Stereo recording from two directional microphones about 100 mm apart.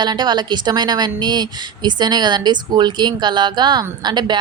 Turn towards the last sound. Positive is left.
turn(degrees=-45)  # may be behind; listen again after turning